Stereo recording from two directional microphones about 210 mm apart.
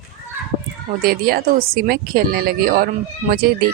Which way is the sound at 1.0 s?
45° right (ahead or behind).